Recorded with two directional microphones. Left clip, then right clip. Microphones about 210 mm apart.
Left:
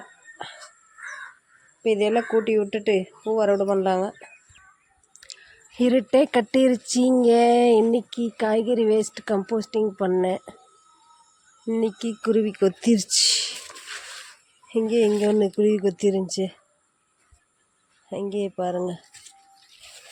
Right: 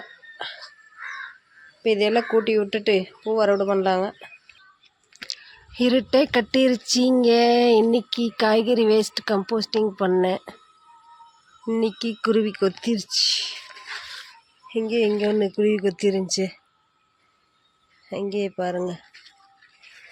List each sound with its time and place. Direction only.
1.8 s speech: 5° left (ahead or behind)
5.5 s speech: 10° left (ahead or behind)
11.6 s speech: 5° left (ahead or behind)
12.8 s speech: 30° left (ahead or behind)
14.7 s speech: 25° left (ahead or behind); by 16.6 s 5° left (ahead or behind)
18.1 s speech: 10° left (ahead or behind)